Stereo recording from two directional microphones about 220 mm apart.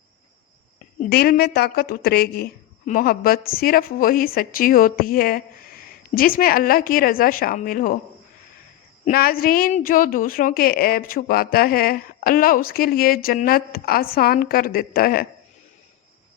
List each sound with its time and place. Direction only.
0.9 s speech: 40° left (ahead or behind)
9.0 s speech: 40° left (ahead or behind)